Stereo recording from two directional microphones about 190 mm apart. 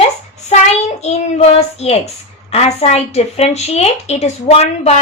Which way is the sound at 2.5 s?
35° left (ahead or behind).